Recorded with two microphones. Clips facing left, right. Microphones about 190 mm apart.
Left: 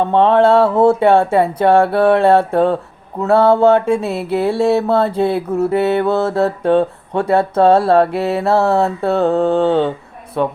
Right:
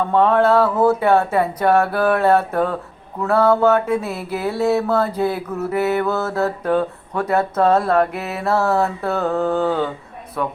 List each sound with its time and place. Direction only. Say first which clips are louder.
0.0 s mantra: left 4 dB; 25° left (ahead or behind)